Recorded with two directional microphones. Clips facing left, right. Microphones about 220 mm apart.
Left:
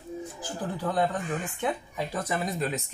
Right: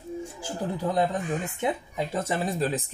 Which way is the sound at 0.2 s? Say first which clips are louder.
Right 2 dB; 25° right (ahead or behind).